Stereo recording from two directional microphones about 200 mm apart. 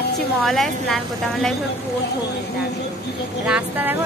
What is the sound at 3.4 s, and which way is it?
Speech, 5° right (ahead or behind).